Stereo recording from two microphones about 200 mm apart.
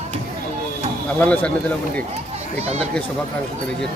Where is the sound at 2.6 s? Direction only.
30° right (ahead or behind).